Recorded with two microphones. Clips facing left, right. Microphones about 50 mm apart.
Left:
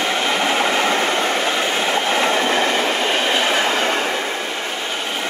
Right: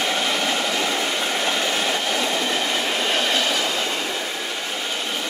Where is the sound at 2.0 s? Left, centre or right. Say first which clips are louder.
Left 5 dB; left.